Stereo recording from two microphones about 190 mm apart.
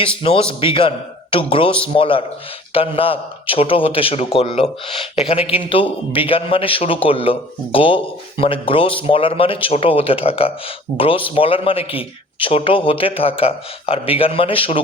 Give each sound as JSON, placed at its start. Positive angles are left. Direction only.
{"t": 0.2, "sound": "a man's voice", "side_deg": 30}